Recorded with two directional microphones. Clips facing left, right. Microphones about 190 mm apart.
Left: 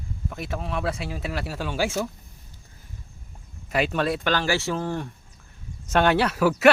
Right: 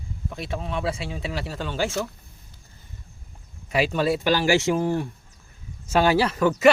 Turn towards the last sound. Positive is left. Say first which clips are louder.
# even
turn(degrees=5)  # may be behind; listen again after turning